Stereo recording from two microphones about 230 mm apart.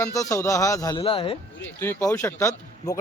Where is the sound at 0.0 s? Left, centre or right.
Centre.